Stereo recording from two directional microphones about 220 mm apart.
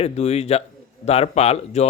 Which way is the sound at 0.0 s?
30° left (ahead or behind).